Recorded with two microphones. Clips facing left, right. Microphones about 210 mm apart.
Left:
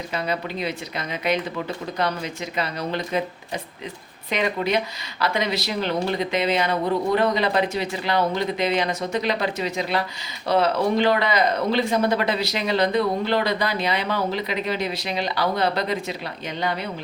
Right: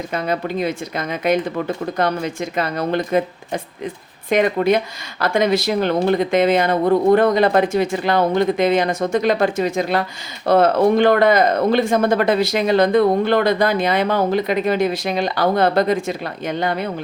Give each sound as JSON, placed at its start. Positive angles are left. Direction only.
{"t": 0.1, "sound": "speech", "side_deg": -50}